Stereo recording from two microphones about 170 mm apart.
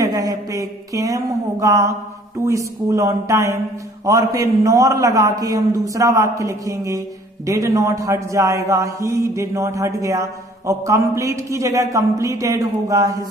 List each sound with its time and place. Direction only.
0.0 s a man's voice: 20° right (ahead or behind)